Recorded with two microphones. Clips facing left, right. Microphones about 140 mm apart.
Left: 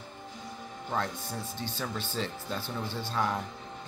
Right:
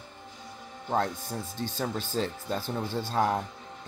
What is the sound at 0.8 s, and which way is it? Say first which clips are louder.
Speech: right 5 dB; 35° right (ahead or behind).